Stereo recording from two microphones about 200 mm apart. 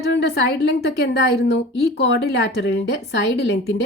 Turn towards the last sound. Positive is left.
turn(degrees=60)  # may be behind; listen again after turning